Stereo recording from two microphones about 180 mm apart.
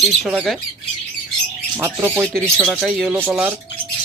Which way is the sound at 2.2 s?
5° left (ahead or behind).